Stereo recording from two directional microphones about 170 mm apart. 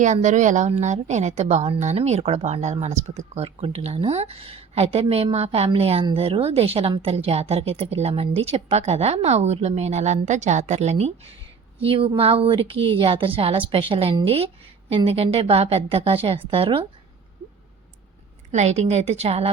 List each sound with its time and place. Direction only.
0.0 s speech: 45° right (ahead or behind)
18.5 s speech: 40° right (ahead or behind)